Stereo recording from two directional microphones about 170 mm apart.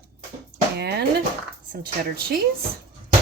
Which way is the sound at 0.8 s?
75° right (ahead or behind).